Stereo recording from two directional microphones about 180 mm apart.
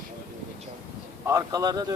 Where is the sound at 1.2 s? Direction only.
20° right (ahead or behind).